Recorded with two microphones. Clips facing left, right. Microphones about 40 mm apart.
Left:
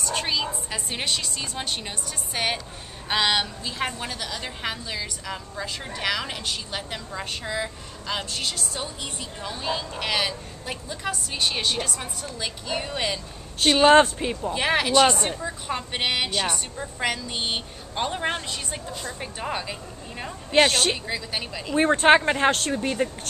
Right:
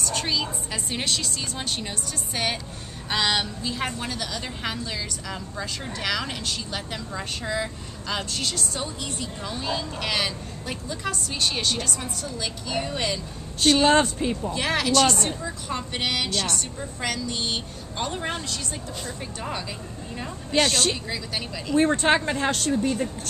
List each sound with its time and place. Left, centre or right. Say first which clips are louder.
0.0 s a woman's voice: left 1 dB; centre
20.2 s a woman's voice: left 4 dB; centre